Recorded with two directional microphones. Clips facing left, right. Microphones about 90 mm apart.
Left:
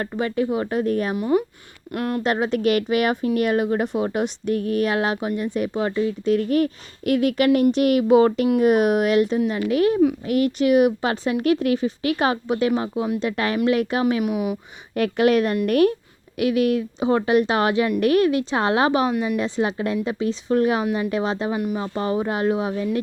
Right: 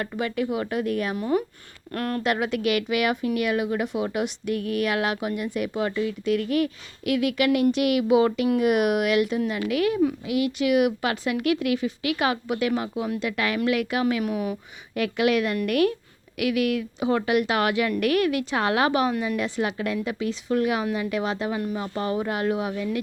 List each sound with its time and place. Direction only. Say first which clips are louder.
0.0 s speech: left 4 dB; 30° left (ahead or behind)
1.1 s a woman's voice: left 4 dB; 20° left (ahead or behind)
2.2 s a woman's voice: left 4 dB; 30° left (ahead or behind); by 14.6 s 15° left (ahead or behind)
14.9 s a woman's voice: left 4 dB; 40° left (ahead or behind)